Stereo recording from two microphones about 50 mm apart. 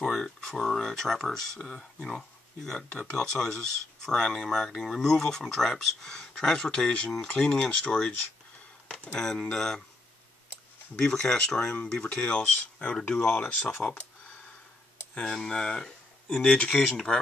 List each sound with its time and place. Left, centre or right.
0.0 s speech: centre
1.6 s speech: centre
9.2 s speech: centre
11.0 s speech: centre
13.8 s speech: left
15.1 s speech: centre
16.7 s speech: centre